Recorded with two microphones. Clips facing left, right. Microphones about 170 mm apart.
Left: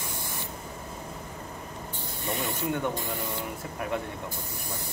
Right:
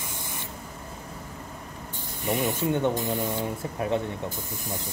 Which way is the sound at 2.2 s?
20° right (ahead or behind).